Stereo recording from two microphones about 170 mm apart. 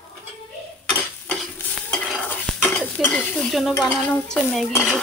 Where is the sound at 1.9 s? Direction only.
5° left (ahead or behind).